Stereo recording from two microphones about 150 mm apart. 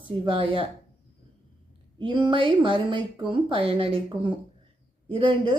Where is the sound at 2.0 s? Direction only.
35° right (ahead or behind).